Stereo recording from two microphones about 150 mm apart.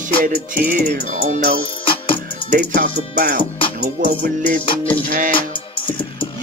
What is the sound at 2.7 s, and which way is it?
Music, 75° right (ahead or behind).